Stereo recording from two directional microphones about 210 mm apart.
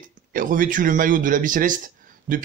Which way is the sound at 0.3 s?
40° right (ahead or behind).